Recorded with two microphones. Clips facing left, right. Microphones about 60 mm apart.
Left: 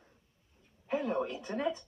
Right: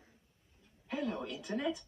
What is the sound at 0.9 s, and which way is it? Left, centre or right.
Speech, left.